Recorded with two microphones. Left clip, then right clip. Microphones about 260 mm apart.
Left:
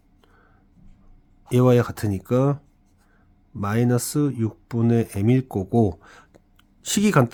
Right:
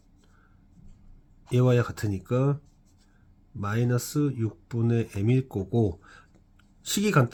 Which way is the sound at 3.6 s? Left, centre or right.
Left.